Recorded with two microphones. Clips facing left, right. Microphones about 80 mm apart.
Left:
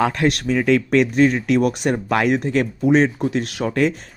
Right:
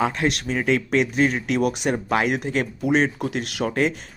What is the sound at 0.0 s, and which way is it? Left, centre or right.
Speech, left.